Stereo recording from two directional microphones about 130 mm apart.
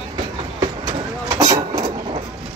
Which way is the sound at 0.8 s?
30° right (ahead or behind).